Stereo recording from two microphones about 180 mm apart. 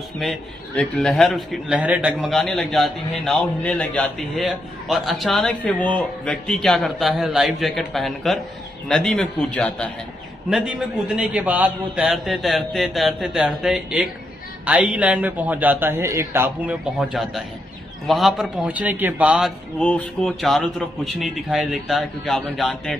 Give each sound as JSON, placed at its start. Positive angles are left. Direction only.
{"t": 0.2, "sound": "a man's voice", "side_deg": 5}
{"t": 10.5, "sound": "a man's voice", "side_deg": -5}
{"t": 17.1, "sound": "a man's voice", "side_deg": 0}
{"t": 19.8, "sound": "a man's voice", "side_deg": 5}